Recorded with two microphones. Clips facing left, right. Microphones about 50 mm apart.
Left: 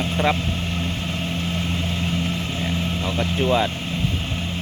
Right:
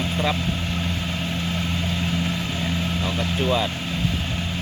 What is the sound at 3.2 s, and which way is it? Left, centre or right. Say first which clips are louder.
Speech: left 3 dB; left.